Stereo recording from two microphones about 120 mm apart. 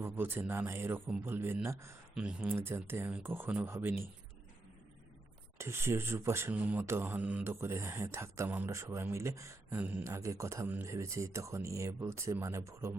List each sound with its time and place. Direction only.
0.0 s speech: 15° right (ahead or behind)
2.1 s speech: 10° right (ahead or behind)
5.5 s speech: 20° right (ahead or behind)
7.5 s speech: 20° right (ahead or behind)